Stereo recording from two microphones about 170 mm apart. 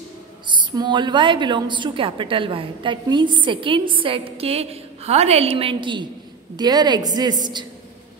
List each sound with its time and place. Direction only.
0.5 s a woman's voice: 25° right (ahead or behind)